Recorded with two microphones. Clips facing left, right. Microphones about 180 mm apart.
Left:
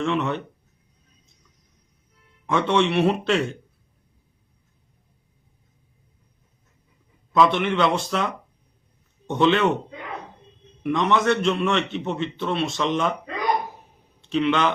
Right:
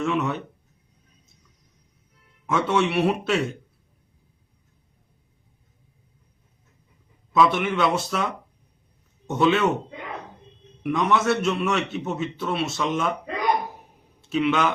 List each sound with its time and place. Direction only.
0.0 s a man's voice: 5° right (ahead or behind)
2.5 s a man's voice: 5° right (ahead or behind)
7.3 s a man's voice: 5° right (ahead or behind)
10.8 s a man's voice: 5° right (ahead or behind)
14.3 s a man's voice: 5° right (ahead or behind)